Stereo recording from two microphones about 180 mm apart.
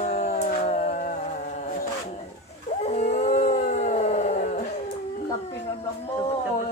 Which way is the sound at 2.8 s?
40° left (ahead or behind).